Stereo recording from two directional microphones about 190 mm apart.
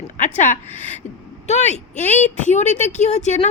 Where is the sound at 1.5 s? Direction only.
35° left (ahead or behind).